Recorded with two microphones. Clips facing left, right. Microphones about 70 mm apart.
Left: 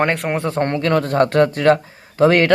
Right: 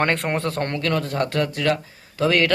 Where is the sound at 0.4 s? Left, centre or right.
Left.